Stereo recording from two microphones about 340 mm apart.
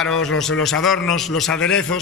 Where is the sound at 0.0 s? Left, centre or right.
Centre.